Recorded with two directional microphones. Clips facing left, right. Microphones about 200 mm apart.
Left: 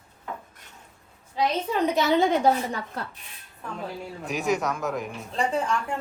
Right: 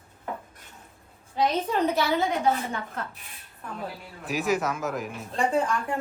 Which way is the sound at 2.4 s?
35° left (ahead or behind).